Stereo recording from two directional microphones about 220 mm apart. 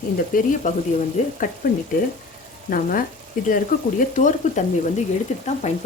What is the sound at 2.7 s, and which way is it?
Speech, 40° left (ahead or behind).